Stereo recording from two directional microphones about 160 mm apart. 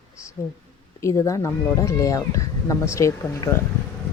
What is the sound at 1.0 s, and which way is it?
Speech, 20° left (ahead or behind).